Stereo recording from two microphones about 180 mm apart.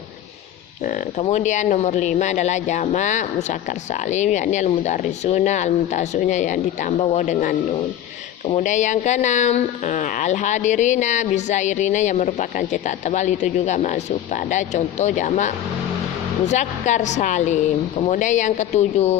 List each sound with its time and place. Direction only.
0.9 s speech: 40° left (ahead or behind)